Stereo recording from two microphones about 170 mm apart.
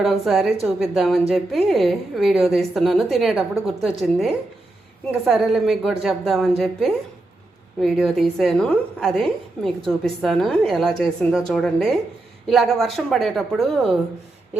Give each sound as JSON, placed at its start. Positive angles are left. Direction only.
{"t": 0.0, "sound": "a woman's voice", "side_deg": 0}
{"t": 5.3, "sound": "a woman's voice", "side_deg": 0}